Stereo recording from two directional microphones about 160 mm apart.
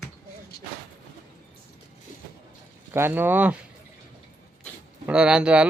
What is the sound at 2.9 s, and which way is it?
Speech, 15° right (ahead or behind).